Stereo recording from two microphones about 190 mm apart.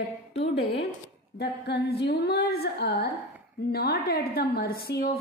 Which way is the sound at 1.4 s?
60° left (ahead or behind).